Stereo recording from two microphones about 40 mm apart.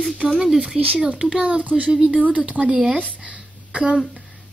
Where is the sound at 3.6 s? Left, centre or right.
Right.